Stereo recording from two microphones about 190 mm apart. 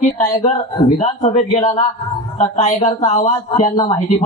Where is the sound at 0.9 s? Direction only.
35° left (ahead or behind).